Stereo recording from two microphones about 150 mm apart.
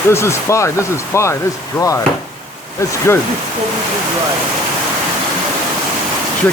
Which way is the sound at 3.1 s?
15° left (ahead or behind).